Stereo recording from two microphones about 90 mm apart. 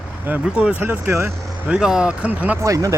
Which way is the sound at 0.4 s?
15° right (ahead or behind).